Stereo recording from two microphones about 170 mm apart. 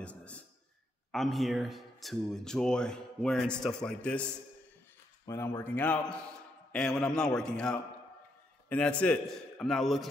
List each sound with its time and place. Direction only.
0.0 s a man's voice: 5° left (ahead or behind)
5.2 s a man's voice: 15° left (ahead or behind); by 10.0 s centre (ahead or behind)